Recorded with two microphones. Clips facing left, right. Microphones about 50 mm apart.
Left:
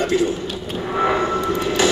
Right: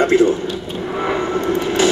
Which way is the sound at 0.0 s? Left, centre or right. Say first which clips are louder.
Right 6 dB; right.